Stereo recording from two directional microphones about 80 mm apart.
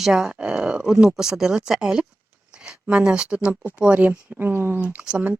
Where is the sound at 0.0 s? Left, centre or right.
Centre.